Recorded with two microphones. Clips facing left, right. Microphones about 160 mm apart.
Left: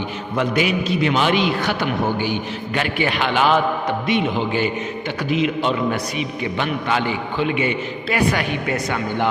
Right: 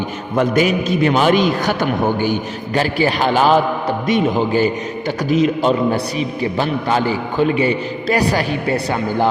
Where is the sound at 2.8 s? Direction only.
35° right (ahead or behind).